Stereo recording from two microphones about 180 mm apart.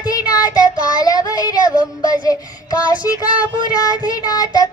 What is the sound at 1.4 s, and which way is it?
Music, 20° left (ahead or behind).